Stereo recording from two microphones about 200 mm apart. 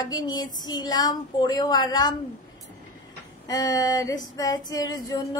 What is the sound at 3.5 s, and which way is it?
A woman's voice, 20° left (ahead or behind).